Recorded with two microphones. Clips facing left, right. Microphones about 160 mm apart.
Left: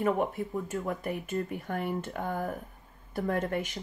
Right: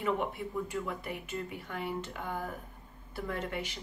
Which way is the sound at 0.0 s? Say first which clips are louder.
Left 4 dB; 45° left (ahead or behind).